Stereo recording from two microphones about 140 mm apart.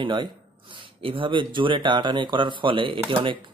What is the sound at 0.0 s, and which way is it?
Speech, 35° right (ahead or behind).